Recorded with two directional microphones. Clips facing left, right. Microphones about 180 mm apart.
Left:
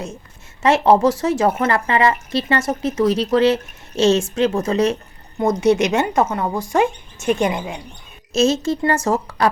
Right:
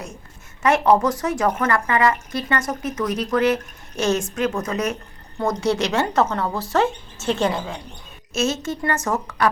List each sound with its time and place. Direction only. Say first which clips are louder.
0.6 s a woman's voice: left 3 dB; 25° left (ahead or behind)
8.3 s a woman's voice: left 6 dB; 35° left (ahead or behind)